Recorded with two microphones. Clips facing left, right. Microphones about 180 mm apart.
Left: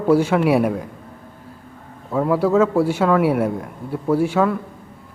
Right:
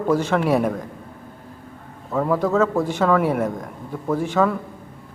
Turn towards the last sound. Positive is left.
turn(degrees=5)  # may be behind; listen again after turning